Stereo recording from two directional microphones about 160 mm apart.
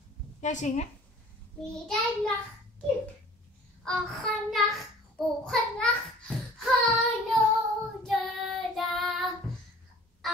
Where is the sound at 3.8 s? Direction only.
Centre (ahead or behind).